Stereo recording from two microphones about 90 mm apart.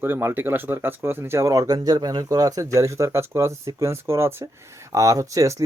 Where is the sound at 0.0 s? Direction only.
25° right (ahead or behind).